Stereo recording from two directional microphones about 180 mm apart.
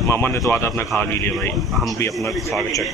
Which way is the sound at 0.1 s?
15° left (ahead or behind).